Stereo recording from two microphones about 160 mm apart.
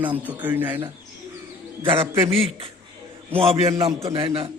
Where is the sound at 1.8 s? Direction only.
35° right (ahead or behind).